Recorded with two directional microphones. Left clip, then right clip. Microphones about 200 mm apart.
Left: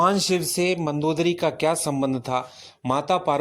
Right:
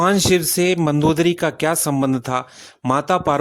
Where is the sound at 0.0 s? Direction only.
40° right (ahead or behind).